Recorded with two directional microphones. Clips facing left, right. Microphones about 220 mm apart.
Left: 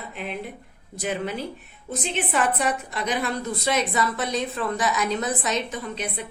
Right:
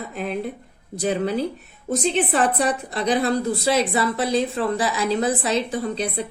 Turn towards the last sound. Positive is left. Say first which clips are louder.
# right 6 dB
turn(degrees=-35)  # may be behind; listen again after turning